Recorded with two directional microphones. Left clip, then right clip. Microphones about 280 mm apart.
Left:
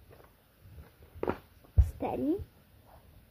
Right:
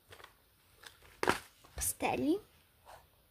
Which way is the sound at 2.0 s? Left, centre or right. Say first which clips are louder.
Left 1 dB; right.